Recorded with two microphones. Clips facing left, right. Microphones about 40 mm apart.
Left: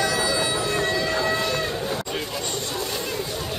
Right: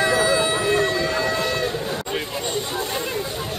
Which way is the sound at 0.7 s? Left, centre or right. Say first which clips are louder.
Right 2 dB; centre.